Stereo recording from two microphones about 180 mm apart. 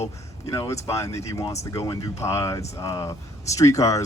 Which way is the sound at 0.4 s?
15° left (ahead or behind).